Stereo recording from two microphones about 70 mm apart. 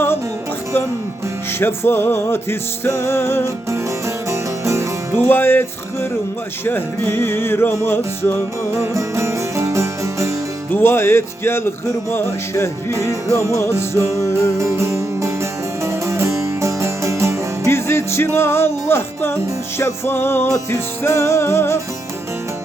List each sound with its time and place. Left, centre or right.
1.5 s music: left
3.7 s music: right
5.1 s music: left
8.7 s music: right
10.7 s music: left
12.9 s music: right
14.2 s music: left
14.6 s music: right
17.7 s music: left